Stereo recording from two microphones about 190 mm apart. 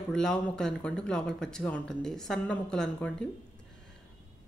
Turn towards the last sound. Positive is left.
turn(degrees=5)  # may be behind; listen again after turning